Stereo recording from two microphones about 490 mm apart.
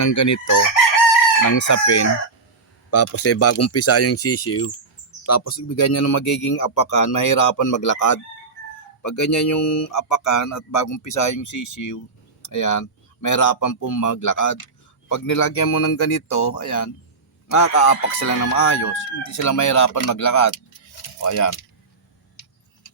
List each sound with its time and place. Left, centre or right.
0.0 s speech: left